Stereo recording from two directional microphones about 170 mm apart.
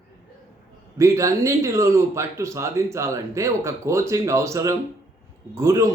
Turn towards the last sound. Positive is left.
turn(degrees=-15)  # may be behind; listen again after turning